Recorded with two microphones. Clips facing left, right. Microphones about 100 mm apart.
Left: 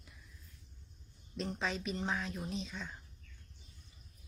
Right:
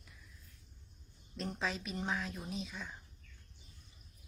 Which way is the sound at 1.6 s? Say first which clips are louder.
Left 1 dB; centre (ahead or behind).